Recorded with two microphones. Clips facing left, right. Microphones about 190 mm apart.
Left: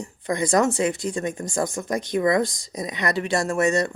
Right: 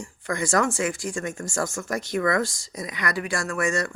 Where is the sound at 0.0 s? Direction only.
20° left (ahead or behind).